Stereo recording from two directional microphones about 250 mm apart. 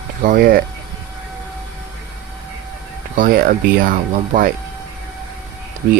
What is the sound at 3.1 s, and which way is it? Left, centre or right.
Speech, right.